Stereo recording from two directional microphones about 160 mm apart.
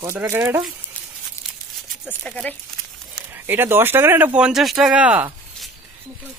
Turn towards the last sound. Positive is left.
turn(degrees=-10)  # may be behind; listen again after turning